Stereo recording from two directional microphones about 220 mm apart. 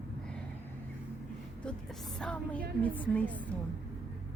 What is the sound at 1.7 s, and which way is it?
A woman's voice, centre (ahead or behind).